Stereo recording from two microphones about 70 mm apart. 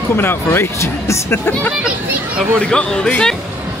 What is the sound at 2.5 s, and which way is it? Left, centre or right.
Speech, centre.